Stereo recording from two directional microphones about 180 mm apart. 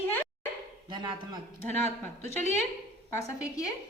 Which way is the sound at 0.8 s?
25° right (ahead or behind).